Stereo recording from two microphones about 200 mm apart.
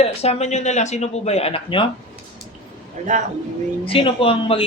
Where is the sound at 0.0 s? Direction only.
30° left (ahead or behind).